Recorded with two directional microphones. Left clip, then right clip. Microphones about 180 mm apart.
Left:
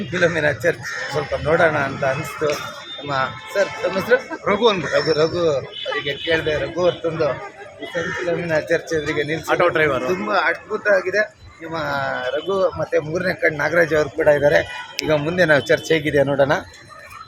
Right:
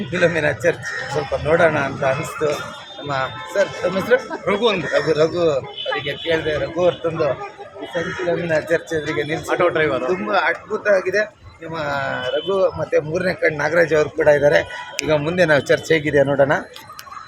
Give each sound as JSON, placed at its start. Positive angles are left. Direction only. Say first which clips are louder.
{"t": 0.1, "sound": "speech", "louder": "even", "side_deg": -10}
{"t": 3.1, "sound": "speech", "louder": "even", "side_deg": 5}
{"t": 4.4, "sound": "speech", "louder": "left 3 dB", "side_deg": 30}
{"t": 5.0, "sound": "a man's voice", "louder": "right 2 dB", "side_deg": 10}
{"t": 8.4, "sound": "a man's voice", "louder": "left 1 dB", "side_deg": 15}
{"t": 9.5, "sound": "a man's voice", "louder": "left 1 dB", "side_deg": 50}
{"t": 10.2, "sound": "speech", "louder": "even", "side_deg": 0}